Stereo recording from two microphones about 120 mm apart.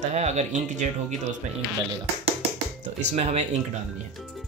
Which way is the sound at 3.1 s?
65° right (ahead or behind).